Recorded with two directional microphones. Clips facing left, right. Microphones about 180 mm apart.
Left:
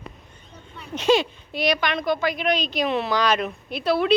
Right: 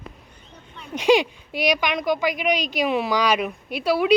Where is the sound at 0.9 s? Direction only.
15° right (ahead or behind).